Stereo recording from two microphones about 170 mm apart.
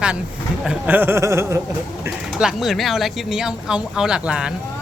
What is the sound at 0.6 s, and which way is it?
Speech, 5° right (ahead or behind).